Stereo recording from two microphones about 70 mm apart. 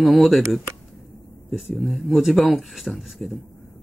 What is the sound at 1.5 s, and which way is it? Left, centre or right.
Speech, centre.